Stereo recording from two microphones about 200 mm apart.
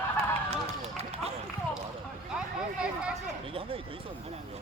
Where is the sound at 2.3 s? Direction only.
5° right (ahead or behind).